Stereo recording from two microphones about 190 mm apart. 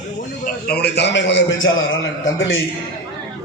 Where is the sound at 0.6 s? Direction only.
55° left (ahead or behind).